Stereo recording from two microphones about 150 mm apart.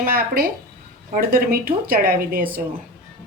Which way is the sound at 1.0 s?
75° right (ahead or behind).